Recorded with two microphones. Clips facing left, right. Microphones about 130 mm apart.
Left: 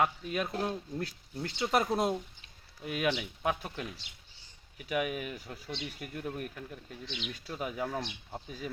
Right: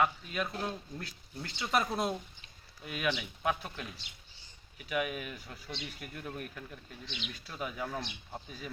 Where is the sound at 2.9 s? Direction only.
40° left (ahead or behind).